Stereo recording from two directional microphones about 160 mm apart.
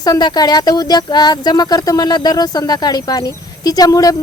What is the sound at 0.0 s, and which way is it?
Speech, 25° left (ahead or behind).